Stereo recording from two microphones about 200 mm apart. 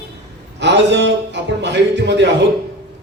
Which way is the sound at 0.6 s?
60° right (ahead or behind).